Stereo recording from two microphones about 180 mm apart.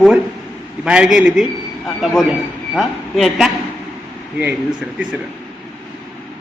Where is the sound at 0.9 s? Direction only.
5° right (ahead or behind).